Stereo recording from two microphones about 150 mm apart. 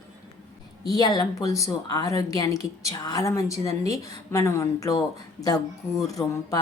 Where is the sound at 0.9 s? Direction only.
25° left (ahead or behind).